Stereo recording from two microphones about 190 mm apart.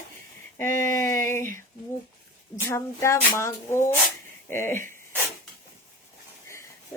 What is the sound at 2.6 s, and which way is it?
A woman's voice, 15° left (ahead or behind).